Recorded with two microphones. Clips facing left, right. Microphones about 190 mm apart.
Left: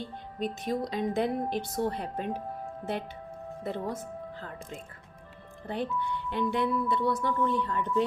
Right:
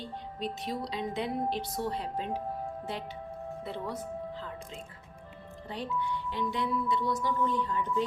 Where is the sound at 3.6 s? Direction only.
45° left (ahead or behind).